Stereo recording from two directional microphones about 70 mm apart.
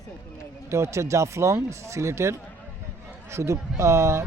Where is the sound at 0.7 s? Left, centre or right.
Right.